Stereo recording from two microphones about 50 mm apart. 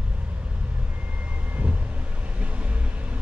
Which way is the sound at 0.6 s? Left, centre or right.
Right.